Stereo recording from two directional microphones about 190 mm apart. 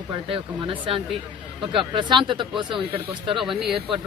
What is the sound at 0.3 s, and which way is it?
Speech, 30° right (ahead or behind).